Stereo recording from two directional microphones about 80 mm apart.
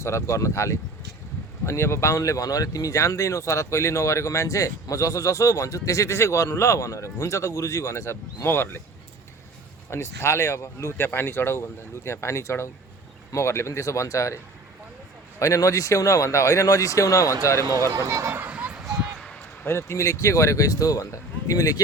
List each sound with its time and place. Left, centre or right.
0.0 s speech: left
9.9 s a man's voice: left
17.9 s speech: right
18.3 s a sound: centre
19.2 s basketball bounce: centre
19.6 s a man's voice: left